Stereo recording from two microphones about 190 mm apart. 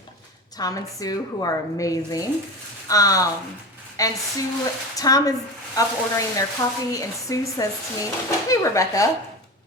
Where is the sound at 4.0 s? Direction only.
20° left (ahead or behind).